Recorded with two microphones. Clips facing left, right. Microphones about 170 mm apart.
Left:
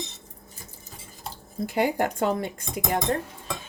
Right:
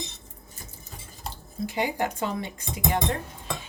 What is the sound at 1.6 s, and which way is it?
Speech, 50° left (ahead or behind).